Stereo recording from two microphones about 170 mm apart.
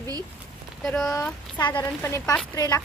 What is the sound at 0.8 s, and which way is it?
Speech, 5° left (ahead or behind).